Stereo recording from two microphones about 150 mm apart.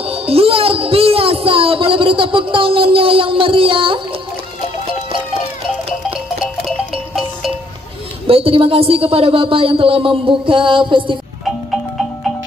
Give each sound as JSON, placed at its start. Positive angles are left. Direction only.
{"t": 0.0, "sound": "music", "side_deg": -40}
{"t": 6.9, "sound": "music", "side_deg": 0}
{"t": 8.3, "sound": "speech", "side_deg": -40}